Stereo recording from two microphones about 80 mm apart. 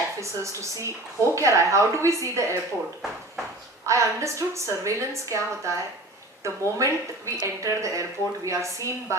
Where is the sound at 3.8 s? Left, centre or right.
Right.